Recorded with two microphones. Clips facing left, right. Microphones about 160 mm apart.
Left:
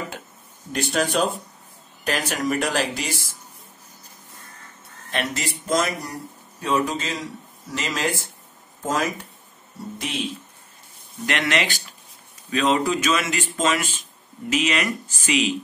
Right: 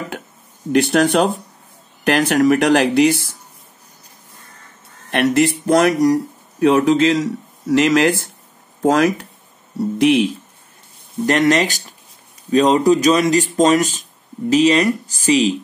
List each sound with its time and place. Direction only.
0.7 s speech: 65° right (ahead or behind)
5.1 s speech: 60° right (ahead or behind)
11.2 s speech: 40° right (ahead or behind)